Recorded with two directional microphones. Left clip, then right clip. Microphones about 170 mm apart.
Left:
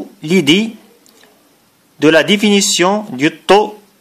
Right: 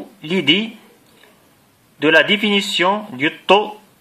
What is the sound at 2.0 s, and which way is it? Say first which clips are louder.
A man's voice: left 3 dB; 40° left (ahead or behind).